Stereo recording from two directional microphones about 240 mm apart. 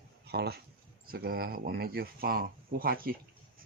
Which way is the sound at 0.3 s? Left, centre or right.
Right.